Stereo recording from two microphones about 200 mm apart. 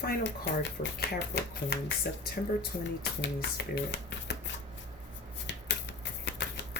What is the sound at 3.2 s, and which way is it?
Speech, 60° left (ahead or behind).